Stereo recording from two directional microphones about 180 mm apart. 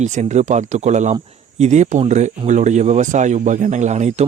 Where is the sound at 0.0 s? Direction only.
40° right (ahead or behind).